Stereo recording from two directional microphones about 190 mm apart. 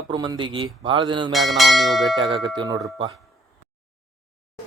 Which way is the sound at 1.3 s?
Centre (ahead or behind).